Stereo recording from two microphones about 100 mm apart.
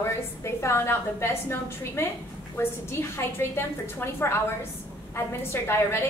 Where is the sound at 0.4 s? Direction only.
25° left (ahead or behind).